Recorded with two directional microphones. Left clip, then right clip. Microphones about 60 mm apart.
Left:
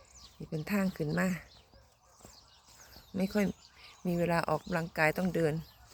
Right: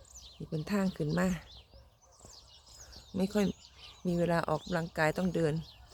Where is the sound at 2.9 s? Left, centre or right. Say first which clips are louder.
Right 1 dB; right.